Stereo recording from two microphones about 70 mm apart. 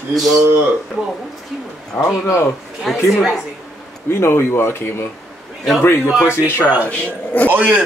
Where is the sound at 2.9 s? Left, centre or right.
Centre.